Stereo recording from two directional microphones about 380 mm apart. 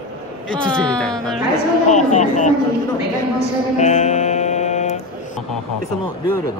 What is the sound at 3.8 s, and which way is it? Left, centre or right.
Music, centre.